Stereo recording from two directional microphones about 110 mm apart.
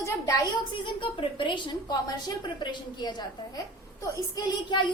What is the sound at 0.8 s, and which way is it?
A woman's voice, 50° left (ahead or behind).